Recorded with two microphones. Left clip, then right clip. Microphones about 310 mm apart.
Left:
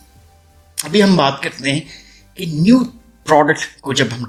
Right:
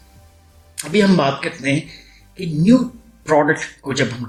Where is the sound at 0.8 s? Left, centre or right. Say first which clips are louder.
Left 3 dB; left.